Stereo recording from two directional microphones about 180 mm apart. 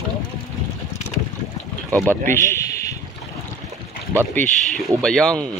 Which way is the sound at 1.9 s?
10° left (ahead or behind).